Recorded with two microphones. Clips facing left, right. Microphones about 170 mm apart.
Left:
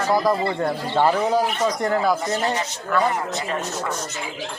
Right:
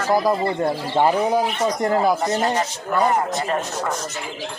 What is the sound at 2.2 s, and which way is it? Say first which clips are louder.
A man's voice: right 3 dB; 40° right (ahead or behind).